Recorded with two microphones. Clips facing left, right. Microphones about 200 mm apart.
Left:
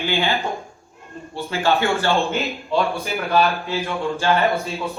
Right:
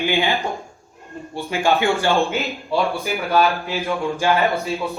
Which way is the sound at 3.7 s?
15° right (ahead or behind).